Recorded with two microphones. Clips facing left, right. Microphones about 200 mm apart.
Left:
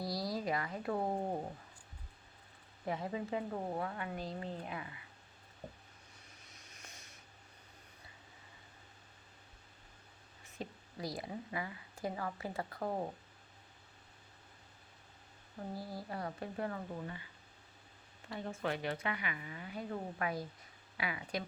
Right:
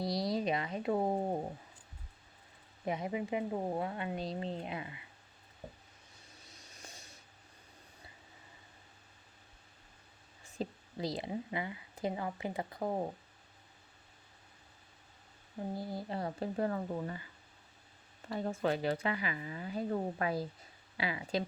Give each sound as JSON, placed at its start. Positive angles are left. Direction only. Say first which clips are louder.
{"t": 0.0, "sound": "a sound", "louder": "right 4 dB", "side_deg": -20}
{"t": 2.8, "sound": "a woman's voice", "louder": "right 3 dB", "side_deg": -20}
{"t": 6.7, "sound": "a sound", "louder": "right 4 dB", "side_deg": -30}
{"t": 10.6, "sound": "speech", "louder": "right 5 dB", "side_deg": -25}
{"t": 15.7, "sound": "a woman's voice", "louder": "right 4 dB", "side_deg": -25}
{"t": 18.3, "sound": "a woman's voice", "louder": "right 5 dB", "side_deg": -35}